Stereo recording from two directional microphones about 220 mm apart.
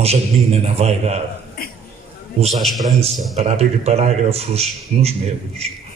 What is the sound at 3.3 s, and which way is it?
A man's voice, 30° right (ahead or behind).